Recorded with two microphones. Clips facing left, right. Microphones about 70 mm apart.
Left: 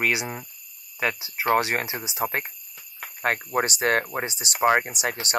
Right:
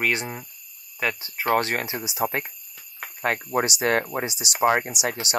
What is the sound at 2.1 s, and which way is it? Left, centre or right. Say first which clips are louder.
Speech: right 3 dB; left.